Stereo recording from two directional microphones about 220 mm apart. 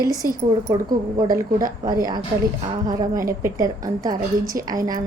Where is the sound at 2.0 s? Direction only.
15° right (ahead or behind).